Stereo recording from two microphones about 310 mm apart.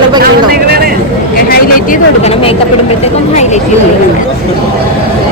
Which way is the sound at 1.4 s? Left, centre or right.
Left.